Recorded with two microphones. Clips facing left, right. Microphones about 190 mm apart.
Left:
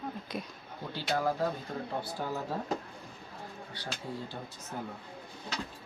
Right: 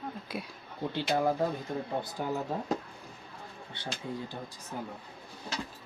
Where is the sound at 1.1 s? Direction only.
20° right (ahead or behind).